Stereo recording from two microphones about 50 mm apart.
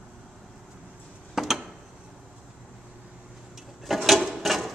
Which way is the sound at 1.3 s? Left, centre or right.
Centre.